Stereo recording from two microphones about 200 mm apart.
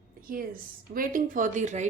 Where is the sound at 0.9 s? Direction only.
45° right (ahead or behind).